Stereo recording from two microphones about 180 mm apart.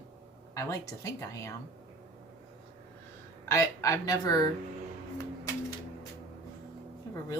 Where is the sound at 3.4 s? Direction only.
15° left (ahead or behind).